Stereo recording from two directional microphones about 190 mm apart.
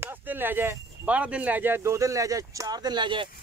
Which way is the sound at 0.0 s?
10° right (ahead or behind).